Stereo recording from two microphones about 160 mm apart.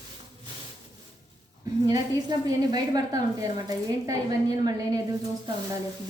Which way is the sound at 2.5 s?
25° right (ahead or behind).